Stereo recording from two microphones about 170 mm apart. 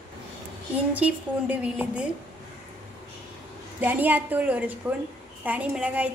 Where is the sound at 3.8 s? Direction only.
10° right (ahead or behind).